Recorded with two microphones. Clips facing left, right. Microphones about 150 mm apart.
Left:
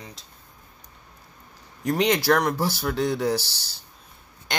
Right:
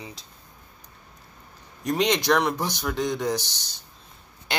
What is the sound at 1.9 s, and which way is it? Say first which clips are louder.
Speech: left 1 dB; 5° left (ahead or behind).